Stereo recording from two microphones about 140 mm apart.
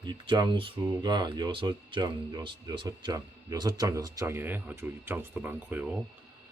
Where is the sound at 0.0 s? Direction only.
30° right (ahead or behind); by 6.0 s 10° right (ahead or behind).